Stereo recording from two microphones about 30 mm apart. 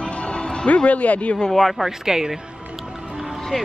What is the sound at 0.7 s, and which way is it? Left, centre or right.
Speech, left.